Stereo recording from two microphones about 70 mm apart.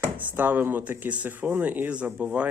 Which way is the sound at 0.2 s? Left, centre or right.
Right.